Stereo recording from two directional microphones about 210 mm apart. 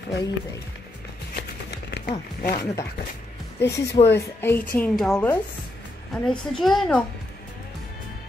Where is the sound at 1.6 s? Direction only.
50° left (ahead or behind).